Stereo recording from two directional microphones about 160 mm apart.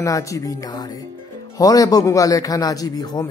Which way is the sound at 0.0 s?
20° left (ahead or behind).